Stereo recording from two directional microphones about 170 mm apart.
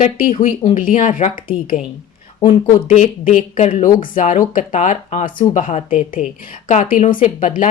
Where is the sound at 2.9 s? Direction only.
50° left (ahead or behind).